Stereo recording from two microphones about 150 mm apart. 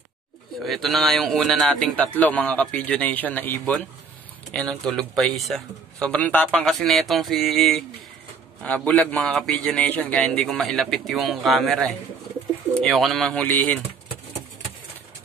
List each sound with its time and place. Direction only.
0.7 s a man's voice: centre (ahead or behind)